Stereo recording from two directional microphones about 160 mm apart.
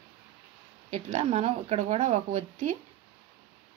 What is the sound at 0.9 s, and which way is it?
Speech, 40° right (ahead or behind).